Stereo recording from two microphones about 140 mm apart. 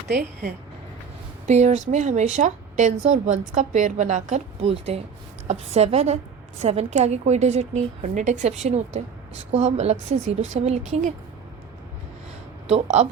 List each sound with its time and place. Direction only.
1.5 s a woman's voice: 55° right (ahead or behind)
12.6 s a woman's voice: 55° right (ahead or behind)